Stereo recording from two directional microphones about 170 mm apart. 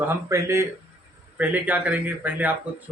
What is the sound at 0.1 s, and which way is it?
A man's voice, 15° right (ahead or behind).